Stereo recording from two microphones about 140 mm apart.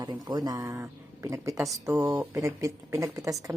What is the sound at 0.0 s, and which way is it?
A woman's voice, 30° right (ahead or behind).